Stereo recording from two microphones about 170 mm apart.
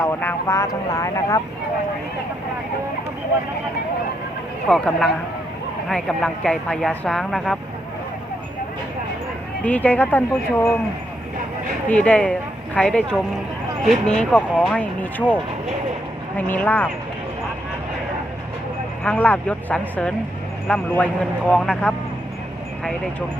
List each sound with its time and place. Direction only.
0.0 s speech: 15° left (ahead or behind)
4.7 s speech: centre (ahead or behind)
9.6 s speech: 10° left (ahead or behind)
11.9 s speech: 10° left (ahead or behind)
16.5 s speech: 10° left (ahead or behind)
19.0 s speech: 10° left (ahead or behind)